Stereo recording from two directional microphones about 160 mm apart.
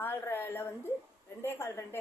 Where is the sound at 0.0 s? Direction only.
15° left (ahead or behind).